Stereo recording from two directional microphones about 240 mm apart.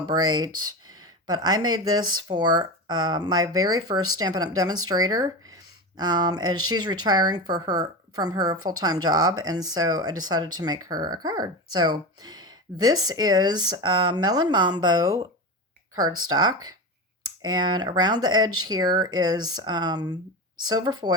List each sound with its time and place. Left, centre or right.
0.1 s speech: centre
16.3 s speech: centre